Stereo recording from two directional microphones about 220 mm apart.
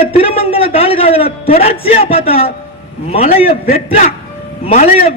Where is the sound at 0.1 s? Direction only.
25° left (ahead or behind).